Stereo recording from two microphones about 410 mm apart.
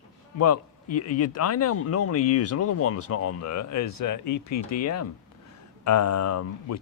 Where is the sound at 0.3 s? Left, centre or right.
Left.